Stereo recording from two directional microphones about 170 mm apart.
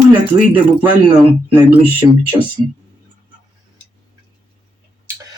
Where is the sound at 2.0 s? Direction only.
20° right (ahead or behind).